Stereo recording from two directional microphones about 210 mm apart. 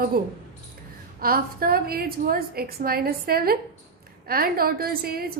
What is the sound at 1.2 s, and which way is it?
A woman's voice, 45° right (ahead or behind).